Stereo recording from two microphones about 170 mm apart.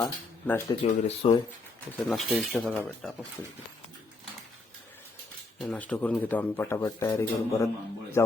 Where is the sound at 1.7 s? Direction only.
10° left (ahead or behind).